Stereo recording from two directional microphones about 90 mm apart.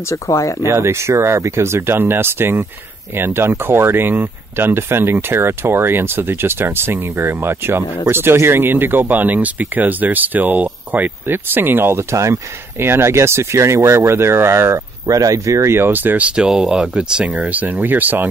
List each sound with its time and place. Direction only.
0.1 s speech: 35° left (ahead or behind)
0.7 s speech: 30° right (ahead or behind)